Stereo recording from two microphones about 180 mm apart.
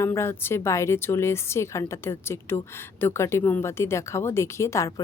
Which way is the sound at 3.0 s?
15° left (ahead or behind).